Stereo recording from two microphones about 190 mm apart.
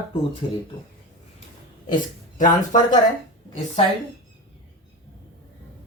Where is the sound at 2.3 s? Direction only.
45° left (ahead or behind).